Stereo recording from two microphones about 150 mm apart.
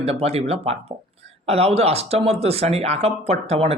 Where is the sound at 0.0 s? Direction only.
45° right (ahead or behind).